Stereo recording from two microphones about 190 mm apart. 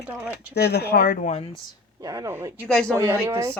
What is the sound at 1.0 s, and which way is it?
Speech, 45° left (ahead or behind).